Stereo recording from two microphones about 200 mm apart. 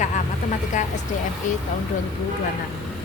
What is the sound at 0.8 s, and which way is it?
Speech, 35° left (ahead or behind).